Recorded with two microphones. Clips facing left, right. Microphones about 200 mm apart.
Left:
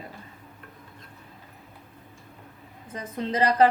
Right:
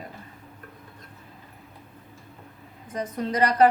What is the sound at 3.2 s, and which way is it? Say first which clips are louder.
Speech: even; 25° left (ahead or behind).